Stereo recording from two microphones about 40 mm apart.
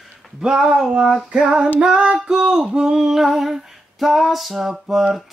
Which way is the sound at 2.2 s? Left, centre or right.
Centre.